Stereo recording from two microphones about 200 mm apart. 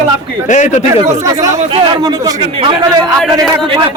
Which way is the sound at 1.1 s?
15° right (ahead or behind).